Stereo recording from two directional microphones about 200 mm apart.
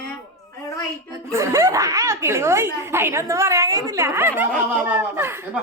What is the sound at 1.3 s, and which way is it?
A woman's voice, 15° right (ahead or behind).